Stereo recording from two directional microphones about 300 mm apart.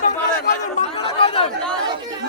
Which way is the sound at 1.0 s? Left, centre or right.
Centre.